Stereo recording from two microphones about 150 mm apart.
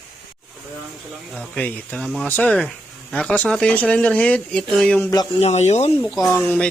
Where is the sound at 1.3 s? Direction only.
5° left (ahead or behind).